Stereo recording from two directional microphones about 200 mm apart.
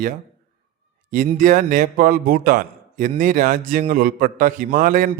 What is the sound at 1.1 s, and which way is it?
A man's voice, 40° right (ahead or behind).